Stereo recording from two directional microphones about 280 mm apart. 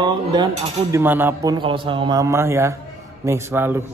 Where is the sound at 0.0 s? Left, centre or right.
Centre.